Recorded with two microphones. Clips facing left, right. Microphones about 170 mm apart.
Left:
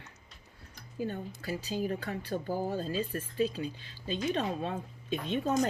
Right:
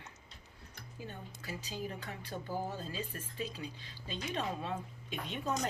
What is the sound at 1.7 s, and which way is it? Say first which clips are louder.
Speech: left 8 dB; 25° left (ahead or behind).